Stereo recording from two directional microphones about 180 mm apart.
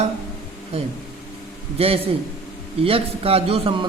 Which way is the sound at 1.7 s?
30° right (ahead or behind).